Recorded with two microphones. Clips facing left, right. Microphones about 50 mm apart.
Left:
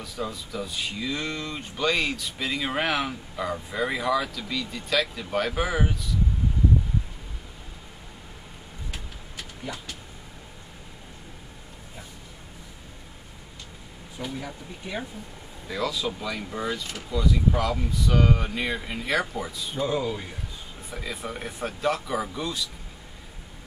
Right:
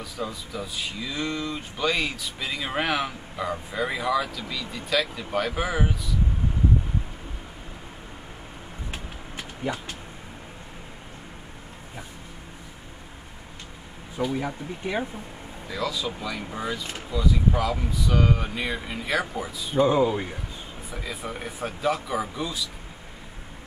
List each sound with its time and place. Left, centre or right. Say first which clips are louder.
0.0 s speech: even; centre
8.9 s a sound: right 3 dB; right
14.3 s speech: right 6 dB; right
15.7 s speech: left 1 dB; centre
19.8 s speech: right 7 dB; right
20.9 s speech: even; centre